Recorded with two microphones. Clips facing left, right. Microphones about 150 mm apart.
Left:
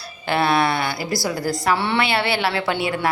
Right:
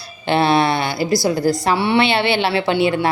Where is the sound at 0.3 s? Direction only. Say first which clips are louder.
Right 4 dB; 25° right (ahead or behind).